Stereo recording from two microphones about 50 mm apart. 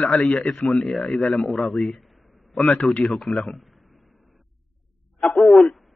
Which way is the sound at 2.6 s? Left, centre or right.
Left.